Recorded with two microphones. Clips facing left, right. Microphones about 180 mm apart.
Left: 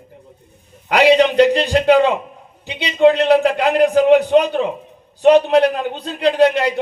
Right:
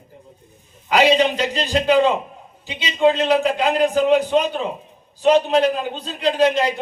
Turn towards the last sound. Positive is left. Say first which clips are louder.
# left 3 dB
turn(degrees=65)  # may be behind; listen again after turning